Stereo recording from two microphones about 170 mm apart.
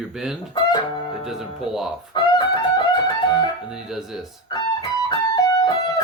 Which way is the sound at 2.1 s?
25° left (ahead or behind).